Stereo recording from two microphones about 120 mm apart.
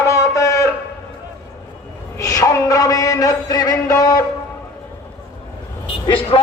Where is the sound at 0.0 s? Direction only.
25° left (ahead or behind).